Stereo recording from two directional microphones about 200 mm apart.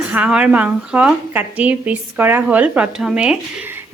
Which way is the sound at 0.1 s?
5° right (ahead or behind).